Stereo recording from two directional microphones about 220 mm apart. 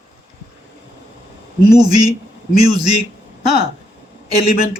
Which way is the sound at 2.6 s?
20° right (ahead or behind).